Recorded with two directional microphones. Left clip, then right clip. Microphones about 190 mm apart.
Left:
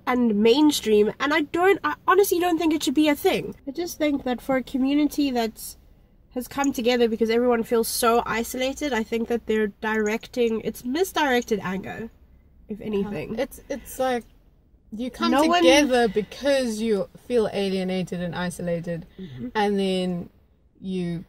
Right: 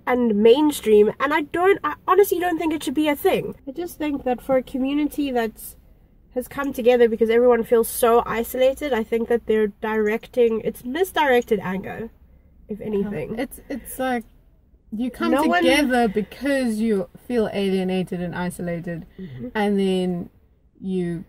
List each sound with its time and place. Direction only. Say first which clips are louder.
0.0 s speech: right 4 dB; 10° left (ahead or behind)
6.5 s speech: right 4 dB; 15° left (ahead or behind)
13.3 s speech: left 1 dB; 15° right (ahead or behind)